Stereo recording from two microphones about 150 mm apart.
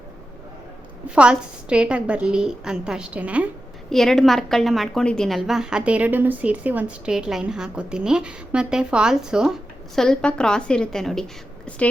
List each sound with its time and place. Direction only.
1.1 s a woman's voice: 5° right (ahead or behind)
3.8 s a woman's voice: centre (ahead or behind)